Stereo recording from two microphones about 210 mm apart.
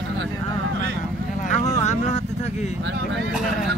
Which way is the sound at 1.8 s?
35° left (ahead or behind).